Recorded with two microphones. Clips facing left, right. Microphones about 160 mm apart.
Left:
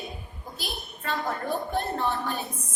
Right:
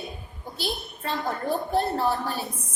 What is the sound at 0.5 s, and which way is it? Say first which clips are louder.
A woman's voice: right 6 dB; 30° right (ahead or behind).